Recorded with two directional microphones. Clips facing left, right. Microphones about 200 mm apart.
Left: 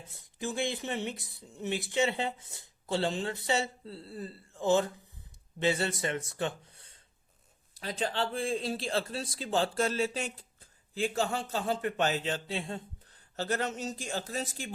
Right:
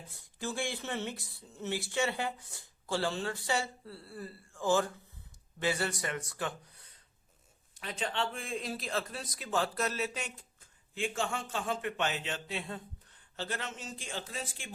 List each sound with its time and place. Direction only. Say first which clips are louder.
0.1 s speech: left 3 dB; 20° left (ahead or behind)
13.3 s speech: left 7 dB; 40° left (ahead or behind)